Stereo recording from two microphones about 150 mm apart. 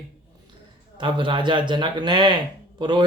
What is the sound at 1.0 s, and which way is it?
Speech, 35° right (ahead or behind).